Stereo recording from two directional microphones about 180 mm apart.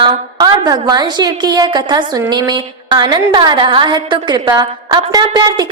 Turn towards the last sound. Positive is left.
turn(degrees=-25)  # may be behind; listen again after turning